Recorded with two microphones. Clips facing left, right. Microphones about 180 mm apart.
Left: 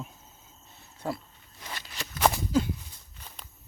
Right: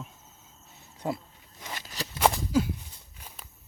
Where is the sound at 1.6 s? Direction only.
20° right (ahead or behind).